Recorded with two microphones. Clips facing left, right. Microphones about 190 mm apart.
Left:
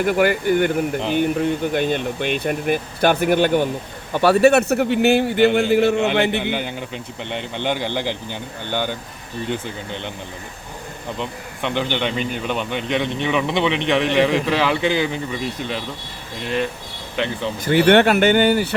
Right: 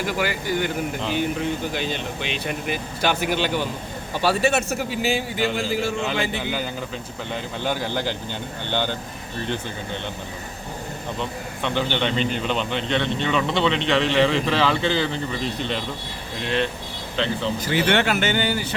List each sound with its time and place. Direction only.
0.0 s a man's voice: 55° left (ahead or behind); by 7.4 s 75° left (ahead or behind)
8.0 s a man's voice: 10° left (ahead or behind)
11.2 s a man's voice: 15° left (ahead or behind)
17.2 s a man's voice: 15° left (ahead or behind)
17.7 s a man's voice: 55° left (ahead or behind)